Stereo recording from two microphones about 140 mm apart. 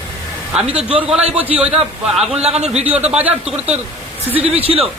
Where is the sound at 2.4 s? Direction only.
50° right (ahead or behind).